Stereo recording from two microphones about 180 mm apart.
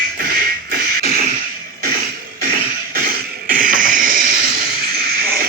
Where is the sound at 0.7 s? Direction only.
55° right (ahead or behind).